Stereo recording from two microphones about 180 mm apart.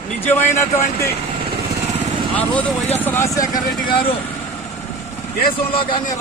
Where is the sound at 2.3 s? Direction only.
10° left (ahead or behind).